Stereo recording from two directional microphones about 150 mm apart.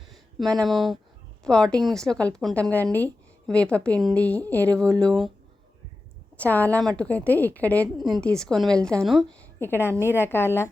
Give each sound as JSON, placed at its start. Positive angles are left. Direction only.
{"t": 0.1, "sound": "a woman's voice", "side_deg": 0}
{"t": 6.3, "sound": "a woman's voice", "side_deg": 10}
{"t": 8.0, "sound": "a woman's voice", "side_deg": 0}
{"t": 9.4, "sound": "a woman's voice", "side_deg": 15}